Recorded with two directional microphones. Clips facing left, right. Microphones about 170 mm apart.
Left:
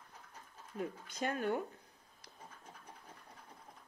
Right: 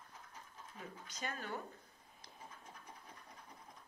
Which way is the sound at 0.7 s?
55° left (ahead or behind).